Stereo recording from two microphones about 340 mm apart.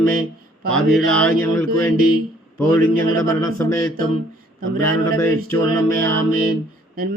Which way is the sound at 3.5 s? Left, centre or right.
Centre.